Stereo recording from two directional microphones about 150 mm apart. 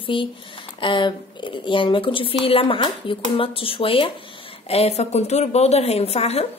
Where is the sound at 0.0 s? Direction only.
35° left (ahead or behind).